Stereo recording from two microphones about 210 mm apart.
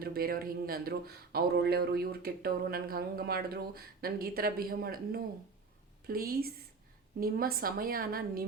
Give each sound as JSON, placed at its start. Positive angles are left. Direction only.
{"t": 0.0, "sound": "a man's voice", "side_deg": -45}